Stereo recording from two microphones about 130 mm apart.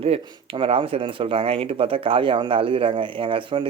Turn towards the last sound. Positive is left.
turn(degrees=-40)  # may be behind; listen again after turning